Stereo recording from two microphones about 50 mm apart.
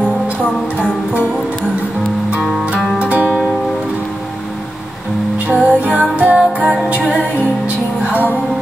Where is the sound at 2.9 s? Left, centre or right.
Right.